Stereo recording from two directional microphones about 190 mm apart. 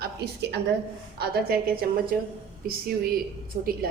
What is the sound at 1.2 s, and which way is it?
A woman's voice, 55° right (ahead or behind).